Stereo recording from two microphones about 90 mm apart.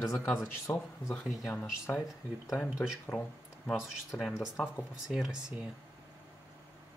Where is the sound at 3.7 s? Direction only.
Centre (ahead or behind).